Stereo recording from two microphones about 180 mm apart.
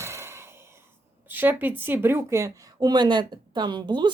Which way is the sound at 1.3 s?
10° right (ahead or behind).